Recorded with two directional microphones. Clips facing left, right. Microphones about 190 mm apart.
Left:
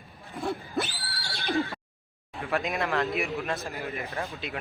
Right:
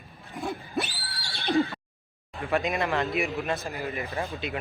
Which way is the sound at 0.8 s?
15° right (ahead or behind).